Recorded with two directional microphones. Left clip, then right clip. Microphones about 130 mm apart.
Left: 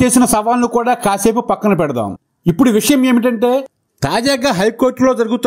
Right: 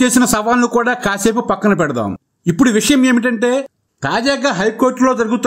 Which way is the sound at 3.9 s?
45° left (ahead or behind).